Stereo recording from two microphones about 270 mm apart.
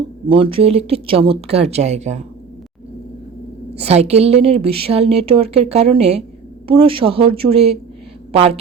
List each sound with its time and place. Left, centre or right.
0.3 s a woman's voice: centre
3.8 s a woman's voice: right